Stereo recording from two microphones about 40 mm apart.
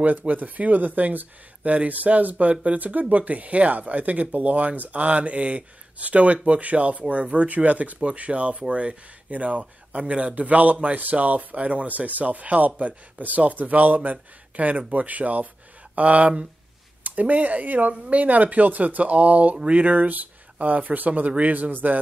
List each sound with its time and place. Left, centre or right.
0.3 s speech: right
2.8 s speech: right
19.5 s speech: right
19.8 s speech: right